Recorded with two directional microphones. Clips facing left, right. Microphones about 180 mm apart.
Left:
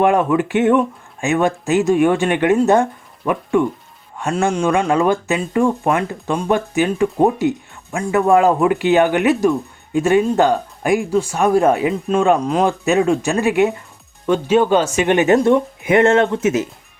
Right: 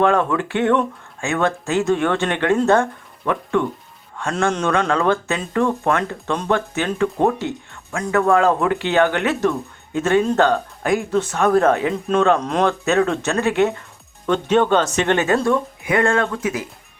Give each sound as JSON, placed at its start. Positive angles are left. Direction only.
{"t": 0.0, "sound": "speech", "side_deg": 15}